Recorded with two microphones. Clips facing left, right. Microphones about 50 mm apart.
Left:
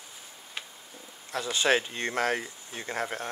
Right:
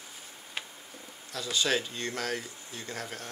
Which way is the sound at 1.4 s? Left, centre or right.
Left.